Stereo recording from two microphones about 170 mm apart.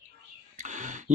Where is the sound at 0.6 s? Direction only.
45° right (ahead or behind).